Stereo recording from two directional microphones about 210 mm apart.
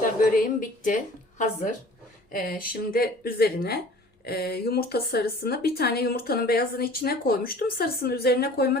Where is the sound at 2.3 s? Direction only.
40° left (ahead or behind).